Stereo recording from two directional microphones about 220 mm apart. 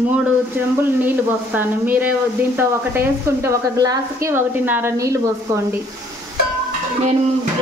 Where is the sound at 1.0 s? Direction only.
10° right (ahead or behind).